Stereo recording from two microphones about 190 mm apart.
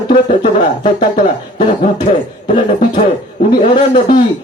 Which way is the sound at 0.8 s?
45° left (ahead or behind).